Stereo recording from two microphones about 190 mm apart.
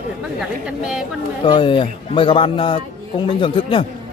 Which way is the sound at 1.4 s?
25° left (ahead or behind).